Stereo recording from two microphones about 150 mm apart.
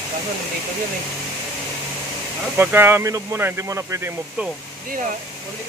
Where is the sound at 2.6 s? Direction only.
15° right (ahead or behind).